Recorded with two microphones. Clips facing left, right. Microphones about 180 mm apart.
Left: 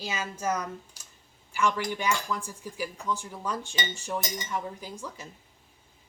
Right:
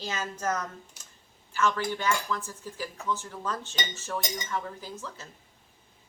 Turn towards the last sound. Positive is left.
turn(degrees=15)  # may be behind; listen again after turning